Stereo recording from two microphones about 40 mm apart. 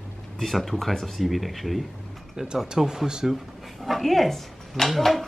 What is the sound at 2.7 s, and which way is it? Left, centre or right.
Speech, centre.